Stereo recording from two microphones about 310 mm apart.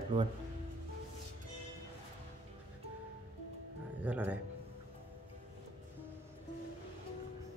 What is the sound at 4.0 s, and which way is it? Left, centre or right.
Speech, centre.